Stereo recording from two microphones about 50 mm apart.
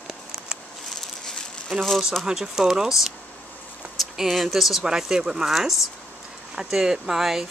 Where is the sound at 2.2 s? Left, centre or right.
Centre.